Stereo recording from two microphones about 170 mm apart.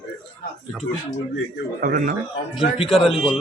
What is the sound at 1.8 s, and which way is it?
Speech, 55° right (ahead or behind).